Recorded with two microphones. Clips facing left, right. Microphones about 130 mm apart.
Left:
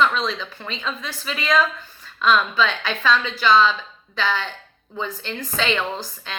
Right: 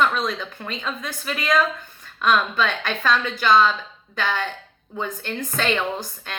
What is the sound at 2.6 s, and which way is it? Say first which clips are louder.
A woman's voice: left 1 dB; 50° right (ahead or behind).